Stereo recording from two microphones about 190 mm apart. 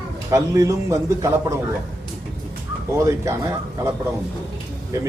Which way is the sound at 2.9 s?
15° right (ahead or behind).